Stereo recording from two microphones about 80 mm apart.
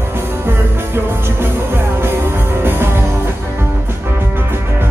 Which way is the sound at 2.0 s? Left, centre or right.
Right.